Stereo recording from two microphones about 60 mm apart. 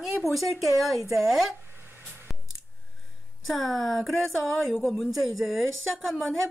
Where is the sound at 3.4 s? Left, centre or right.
Centre.